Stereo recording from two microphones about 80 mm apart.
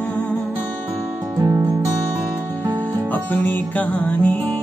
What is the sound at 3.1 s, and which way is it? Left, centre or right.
Music, left.